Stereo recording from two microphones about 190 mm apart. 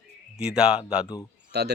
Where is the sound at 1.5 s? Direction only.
60° right (ahead or behind).